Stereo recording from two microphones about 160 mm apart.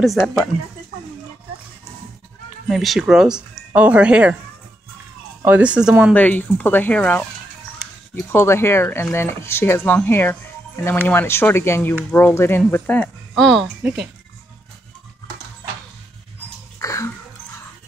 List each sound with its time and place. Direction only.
0.0 s speech: centre (ahead or behind)
2.7 s speech: centre (ahead or behind)
5.4 s speech: 10° right (ahead or behind)
6.1 s speech: 10° left (ahead or behind)
13.0 s speech: centre (ahead or behind)
16.8 s a sound: 20° left (ahead or behind)